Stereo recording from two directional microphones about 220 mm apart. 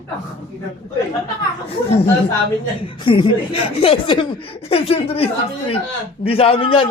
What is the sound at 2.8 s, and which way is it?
Speech, 20° left (ahead or behind).